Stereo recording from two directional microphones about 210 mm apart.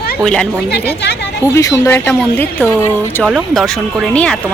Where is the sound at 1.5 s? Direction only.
10° left (ahead or behind).